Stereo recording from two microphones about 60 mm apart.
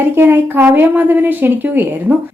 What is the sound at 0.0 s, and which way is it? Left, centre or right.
A woman's voice, right.